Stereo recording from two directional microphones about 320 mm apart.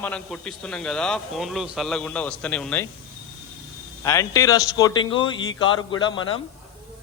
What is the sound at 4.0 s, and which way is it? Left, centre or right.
A man's voice, centre.